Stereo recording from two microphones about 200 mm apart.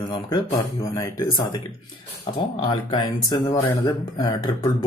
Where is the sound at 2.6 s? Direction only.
20° left (ahead or behind).